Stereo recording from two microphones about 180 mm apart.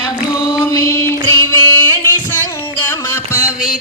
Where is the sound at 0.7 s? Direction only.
15° left (ahead or behind).